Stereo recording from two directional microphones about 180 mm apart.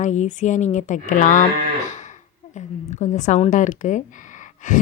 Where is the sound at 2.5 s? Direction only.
40° left (ahead or behind).